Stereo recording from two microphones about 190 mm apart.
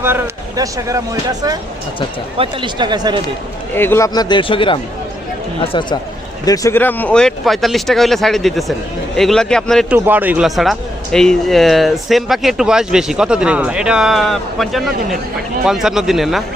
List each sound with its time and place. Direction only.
0.0 s speech: 10° right (ahead or behind)
3.8 s a man's voice: 15° left (ahead or behind)
10.1 s speech: 10° right (ahead or behind)